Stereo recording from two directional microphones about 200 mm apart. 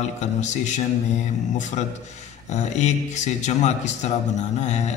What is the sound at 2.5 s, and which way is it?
A man's voice, 35° left (ahead or behind).